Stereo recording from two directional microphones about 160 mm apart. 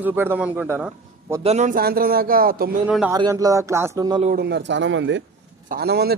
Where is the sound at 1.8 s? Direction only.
70° right (ahead or behind).